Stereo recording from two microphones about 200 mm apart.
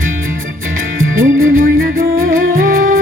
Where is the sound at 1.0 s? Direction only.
85° right.